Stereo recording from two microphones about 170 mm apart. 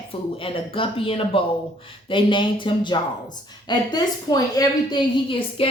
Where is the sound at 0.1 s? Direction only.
30° left (ahead or behind).